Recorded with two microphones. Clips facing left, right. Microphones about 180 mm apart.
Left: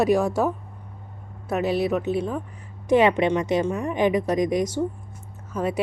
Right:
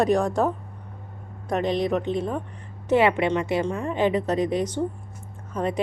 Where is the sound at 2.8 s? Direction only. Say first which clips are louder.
Left 2 dB; 15° left (ahead or behind).